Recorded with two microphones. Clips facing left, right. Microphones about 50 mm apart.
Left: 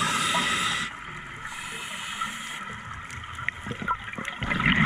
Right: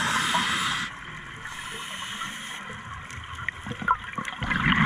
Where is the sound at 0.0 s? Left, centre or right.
Right.